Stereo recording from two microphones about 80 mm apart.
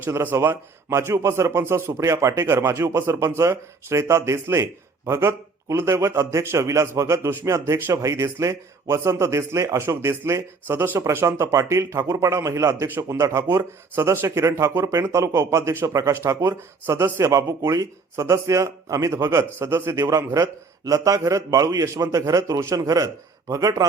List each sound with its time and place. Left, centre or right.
0.0 s a man's voice: right